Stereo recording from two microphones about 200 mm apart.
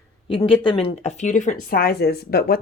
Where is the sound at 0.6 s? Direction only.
25° left (ahead or behind).